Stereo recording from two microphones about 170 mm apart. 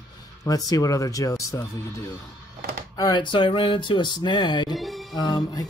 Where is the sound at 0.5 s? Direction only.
20° left (ahead or behind).